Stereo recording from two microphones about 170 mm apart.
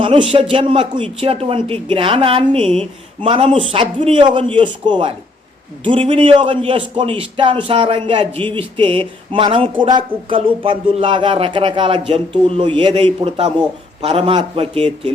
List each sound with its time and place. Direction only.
0.0 s a man's voice: 30° right (ahead or behind)